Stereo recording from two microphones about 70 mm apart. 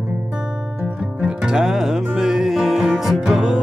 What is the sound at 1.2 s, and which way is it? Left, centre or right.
Music, centre.